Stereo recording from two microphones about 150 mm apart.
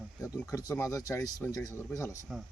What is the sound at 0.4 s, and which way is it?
Speech, 25° left (ahead or behind).